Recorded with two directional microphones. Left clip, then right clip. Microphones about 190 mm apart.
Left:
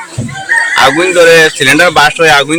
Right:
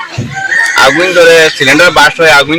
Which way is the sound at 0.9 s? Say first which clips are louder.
Even; 30° left (ahead or behind).